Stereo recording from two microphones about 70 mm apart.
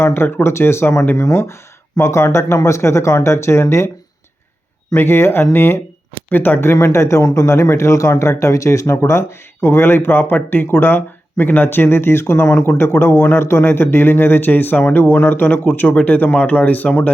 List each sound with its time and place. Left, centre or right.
0.0 s speech: left
4.9 s speech: left
6.7 s speech: left